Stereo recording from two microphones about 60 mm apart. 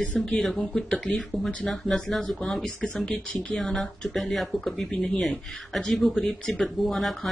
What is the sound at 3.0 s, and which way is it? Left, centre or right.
Speech, left.